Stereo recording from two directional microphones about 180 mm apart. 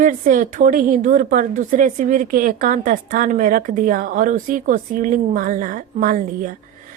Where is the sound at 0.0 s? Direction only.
50° right (ahead or behind).